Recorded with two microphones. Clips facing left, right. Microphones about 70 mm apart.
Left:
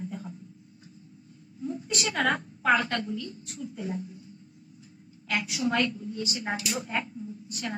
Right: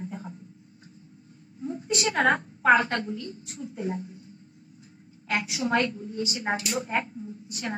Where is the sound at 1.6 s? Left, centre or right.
Right.